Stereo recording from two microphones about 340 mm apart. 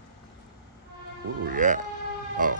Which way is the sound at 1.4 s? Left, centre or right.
Right.